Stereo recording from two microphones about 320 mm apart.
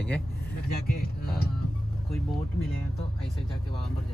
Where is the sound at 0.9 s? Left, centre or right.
Left.